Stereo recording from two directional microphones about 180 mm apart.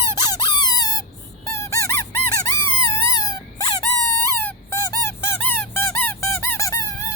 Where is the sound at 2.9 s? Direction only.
20° left (ahead or behind).